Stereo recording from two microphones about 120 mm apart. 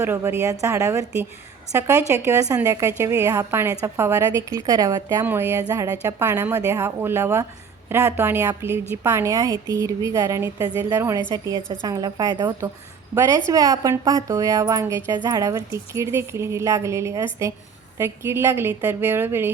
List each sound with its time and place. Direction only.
0.0 s speech: 20° right (ahead or behind)
5.2 s a woman's voice: 20° right (ahead or behind); by 12.7 s 35° right (ahead or behind)
13.1 s speech: 25° right (ahead or behind)